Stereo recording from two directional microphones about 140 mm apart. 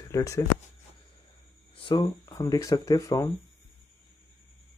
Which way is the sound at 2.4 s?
25° left (ahead or behind).